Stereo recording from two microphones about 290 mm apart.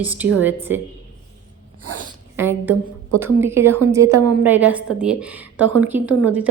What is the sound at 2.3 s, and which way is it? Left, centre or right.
A woman's voice, centre.